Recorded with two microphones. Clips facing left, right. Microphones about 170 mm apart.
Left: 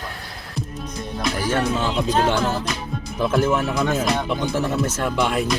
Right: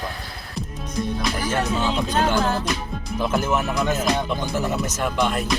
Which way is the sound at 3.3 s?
Centre (ahead or behind).